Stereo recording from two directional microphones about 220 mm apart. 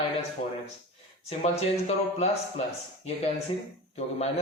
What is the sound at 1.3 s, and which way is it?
Speech, 30° left (ahead or behind).